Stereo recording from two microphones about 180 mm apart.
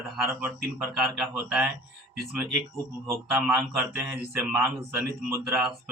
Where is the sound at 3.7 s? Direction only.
10° right (ahead or behind).